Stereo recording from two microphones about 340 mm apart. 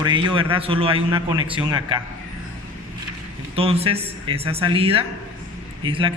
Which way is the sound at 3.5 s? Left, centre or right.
Centre.